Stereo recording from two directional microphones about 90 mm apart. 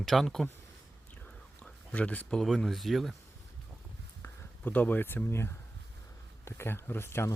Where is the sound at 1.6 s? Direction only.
15° left (ahead or behind).